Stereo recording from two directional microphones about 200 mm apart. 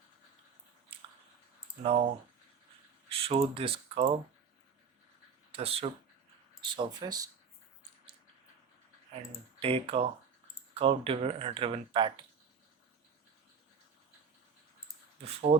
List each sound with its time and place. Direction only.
1.8 s speech: 30° right (ahead or behind)
3.1 s speech: 30° right (ahead or behind)
5.5 s speech: 30° right (ahead or behind)
9.6 s speech: 30° right (ahead or behind)